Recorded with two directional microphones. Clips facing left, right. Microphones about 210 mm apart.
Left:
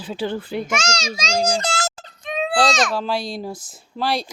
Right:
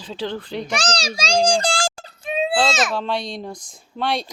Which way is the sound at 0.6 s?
35° right (ahead or behind).